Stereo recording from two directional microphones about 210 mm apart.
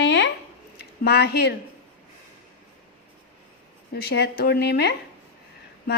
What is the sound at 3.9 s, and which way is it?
Speech, 50° left (ahead or behind).